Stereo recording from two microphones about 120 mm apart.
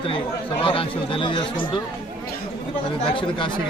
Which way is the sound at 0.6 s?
45° left (ahead or behind).